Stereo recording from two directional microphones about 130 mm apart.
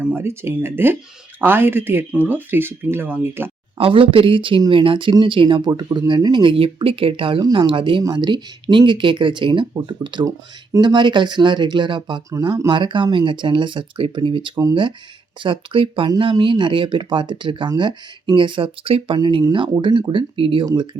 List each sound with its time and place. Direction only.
0.0 s speech: 15° right (ahead or behind)
3.8 s speech: 45° right (ahead or behind)
7.4 s speech: 30° right (ahead or behind)
7.7 s speech: 40° right (ahead or behind)